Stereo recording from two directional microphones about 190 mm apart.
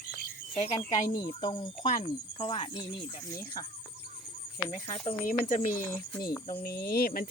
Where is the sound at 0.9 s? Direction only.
25° left (ahead or behind).